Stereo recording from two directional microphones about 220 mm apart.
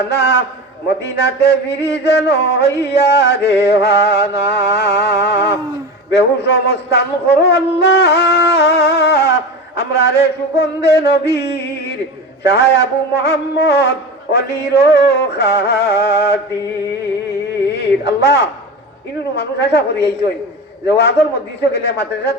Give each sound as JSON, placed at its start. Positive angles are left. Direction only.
{"t": 0.1, "sound": "music", "side_deg": 50}
{"t": 17.7, "sound": "music", "side_deg": 50}